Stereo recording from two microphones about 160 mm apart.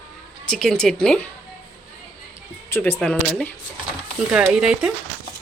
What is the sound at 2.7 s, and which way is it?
Speech, 15° left (ahead or behind).